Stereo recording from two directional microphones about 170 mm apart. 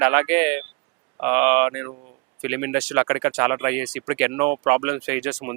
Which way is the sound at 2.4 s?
10° right (ahead or behind).